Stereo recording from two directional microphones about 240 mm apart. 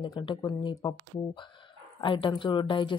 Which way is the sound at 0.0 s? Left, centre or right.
Centre.